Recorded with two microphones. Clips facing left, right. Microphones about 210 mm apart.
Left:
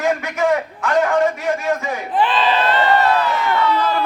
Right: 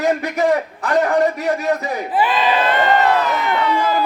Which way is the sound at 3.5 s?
15° right (ahead or behind).